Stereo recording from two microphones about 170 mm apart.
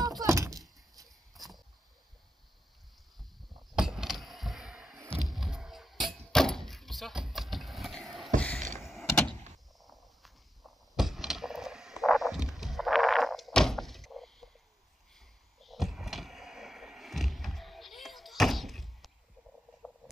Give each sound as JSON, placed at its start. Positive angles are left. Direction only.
{"t": 0.2, "sound": "a sound", "side_deg": -20}
{"t": 1.0, "sound": "horse", "side_deg": 0}
{"t": 3.7, "sound": "a sound", "side_deg": -5}
{"t": 8.8, "sound": "power windows", "side_deg": 0}
{"t": 9.8, "sound": "walk", "side_deg": 0}
{"t": 15.1, "sound": "door", "side_deg": 0}